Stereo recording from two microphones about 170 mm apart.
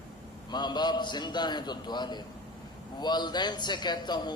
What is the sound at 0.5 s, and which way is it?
A man's voice, 25° left (ahead or behind).